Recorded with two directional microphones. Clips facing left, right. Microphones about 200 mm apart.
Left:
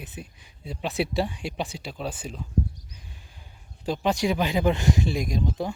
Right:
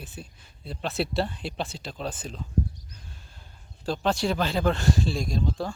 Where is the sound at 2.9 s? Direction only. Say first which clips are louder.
Even; 15° left (ahead or behind).